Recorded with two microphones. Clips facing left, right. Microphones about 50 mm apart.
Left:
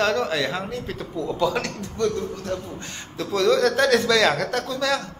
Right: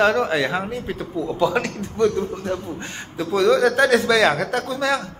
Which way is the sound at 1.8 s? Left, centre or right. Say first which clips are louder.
Right 6 dB; right.